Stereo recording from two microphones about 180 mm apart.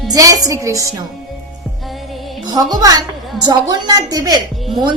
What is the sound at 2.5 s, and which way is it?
A woman's voice, 20° right (ahead or behind).